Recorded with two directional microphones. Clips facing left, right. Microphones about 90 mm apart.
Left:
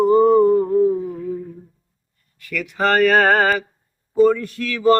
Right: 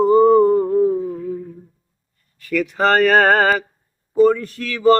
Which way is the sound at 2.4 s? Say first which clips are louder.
Right 3 dB; 35° right (ahead or behind).